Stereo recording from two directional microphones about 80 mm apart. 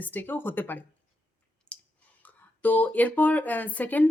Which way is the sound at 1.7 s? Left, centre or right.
Centre.